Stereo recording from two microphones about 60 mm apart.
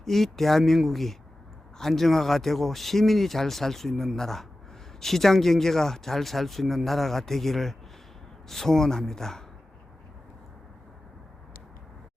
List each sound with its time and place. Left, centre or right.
0.0 s speech: centre